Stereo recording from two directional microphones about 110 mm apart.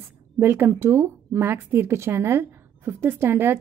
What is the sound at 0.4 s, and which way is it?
Speech, 20° right (ahead or behind).